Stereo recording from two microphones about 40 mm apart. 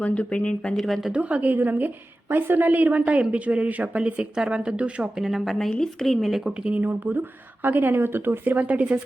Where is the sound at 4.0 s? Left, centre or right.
Right.